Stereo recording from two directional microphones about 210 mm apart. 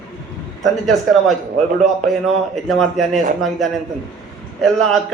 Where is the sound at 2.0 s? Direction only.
40° right (ahead or behind).